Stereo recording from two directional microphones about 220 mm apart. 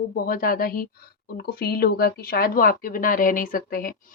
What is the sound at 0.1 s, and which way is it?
A woman's voice, 40° left (ahead or behind).